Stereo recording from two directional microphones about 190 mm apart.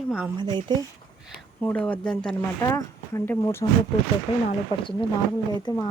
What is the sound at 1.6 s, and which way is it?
Speech, 5° left (ahead or behind).